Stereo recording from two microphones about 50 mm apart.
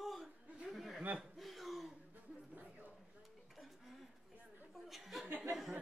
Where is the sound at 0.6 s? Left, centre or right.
Centre.